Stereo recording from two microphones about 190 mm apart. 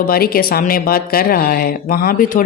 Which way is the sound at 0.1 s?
50° left (ahead or behind).